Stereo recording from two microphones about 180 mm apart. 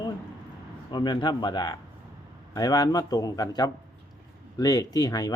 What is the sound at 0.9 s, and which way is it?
Speech, 25° left (ahead or behind).